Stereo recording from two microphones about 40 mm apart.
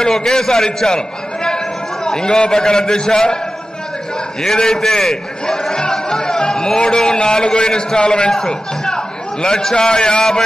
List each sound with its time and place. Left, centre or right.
0.1 s a man's voice: centre
4.4 s a man's voice: centre
8.3 s a man's voice: centre